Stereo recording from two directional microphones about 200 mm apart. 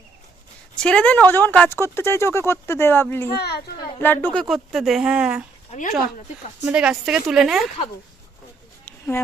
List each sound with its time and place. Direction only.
0.8 s speech: 5° left (ahead or behind)
3.3 s a child's voice: 55° left (ahead or behind)
4.0 s speech: 10° left (ahead or behind)
5.7 s speech: 35° left (ahead or behind)
6.7 s speech: 5° right (ahead or behind)
8.8 s a sound: 10° left (ahead or behind)